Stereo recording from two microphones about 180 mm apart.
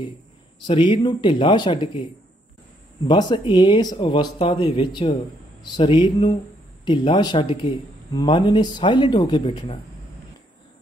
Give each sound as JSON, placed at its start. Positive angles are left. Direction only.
{"t": 0.7, "sound": "speech", "side_deg": 30}
{"t": 3.1, "sound": "speech", "side_deg": 25}